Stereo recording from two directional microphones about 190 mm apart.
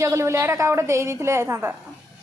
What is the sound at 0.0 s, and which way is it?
A woman's voice, 15° right (ahead or behind).